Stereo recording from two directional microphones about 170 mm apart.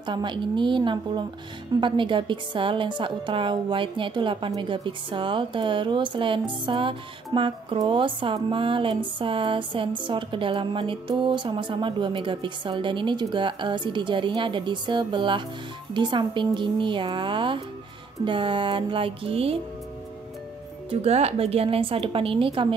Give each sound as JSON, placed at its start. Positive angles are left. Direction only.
{"t": 0.0, "sound": "a woman's voice", "side_deg": -25}
{"t": 20.9, "sound": "speech", "side_deg": -40}